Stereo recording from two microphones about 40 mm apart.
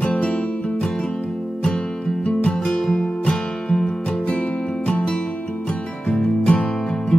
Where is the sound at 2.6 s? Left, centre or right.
Centre.